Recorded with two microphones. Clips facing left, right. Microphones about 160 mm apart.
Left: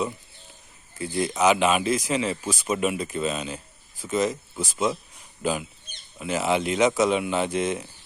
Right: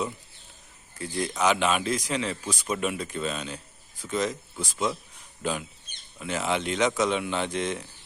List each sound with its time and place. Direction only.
0.9 s speech: 5° left (ahead or behind)